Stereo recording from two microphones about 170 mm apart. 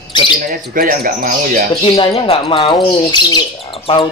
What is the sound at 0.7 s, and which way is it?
Speech, 55° right (ahead or behind).